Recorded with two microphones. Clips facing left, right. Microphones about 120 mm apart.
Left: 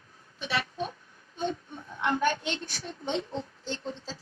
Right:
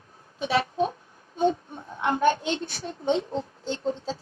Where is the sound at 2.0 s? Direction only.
45° right (ahead or behind).